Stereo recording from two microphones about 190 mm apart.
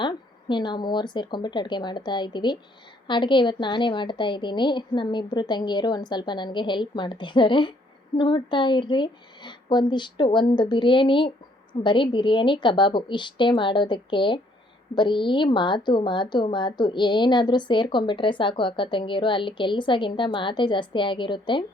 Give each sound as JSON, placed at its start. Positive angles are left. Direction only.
{"t": 0.0, "sound": "a woman's voice", "side_deg": 25}